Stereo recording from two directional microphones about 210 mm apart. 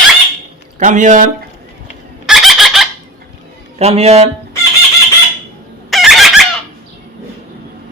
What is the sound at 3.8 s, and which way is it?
Speech, 30° right (ahead or behind).